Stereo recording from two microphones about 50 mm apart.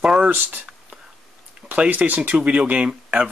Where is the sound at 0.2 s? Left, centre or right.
Right.